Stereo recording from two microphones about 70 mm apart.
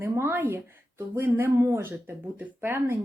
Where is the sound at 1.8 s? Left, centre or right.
Right.